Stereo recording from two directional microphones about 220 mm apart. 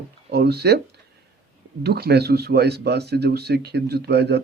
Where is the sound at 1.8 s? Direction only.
45° right (ahead or behind).